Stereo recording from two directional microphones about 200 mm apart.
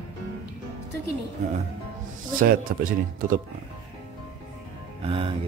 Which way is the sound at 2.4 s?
45° right (ahead or behind).